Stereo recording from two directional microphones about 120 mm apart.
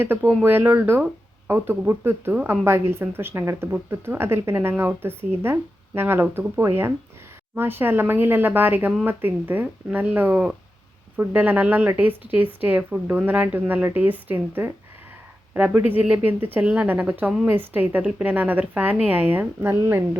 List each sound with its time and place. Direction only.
0.0 s a woman's voice: 15° right (ahead or behind)